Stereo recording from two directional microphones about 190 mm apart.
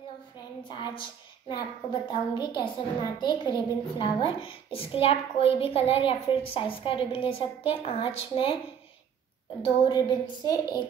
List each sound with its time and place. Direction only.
0.7 s a woman's voice: 25° left (ahead or behind)
9.8 s a woman's voice: 20° left (ahead or behind)